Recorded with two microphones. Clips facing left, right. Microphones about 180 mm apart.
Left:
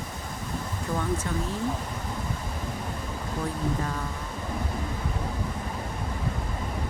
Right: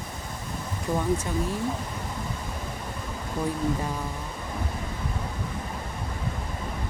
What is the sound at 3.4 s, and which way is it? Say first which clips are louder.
Speech: right 3 dB; 15° right (ahead or behind).